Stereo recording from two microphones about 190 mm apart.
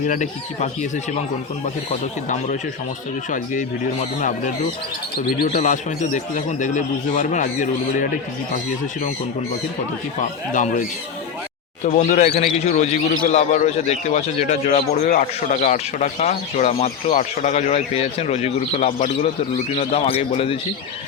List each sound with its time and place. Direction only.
0.1 s a man's voice: 40° left (ahead or behind)
3.2 s speech: 45° left (ahead or behind)
5.4 s a man's voice: 40° left (ahead or behind)
10.5 s speech: 40° left (ahead or behind)
11.9 s a man's voice: 40° left (ahead or behind)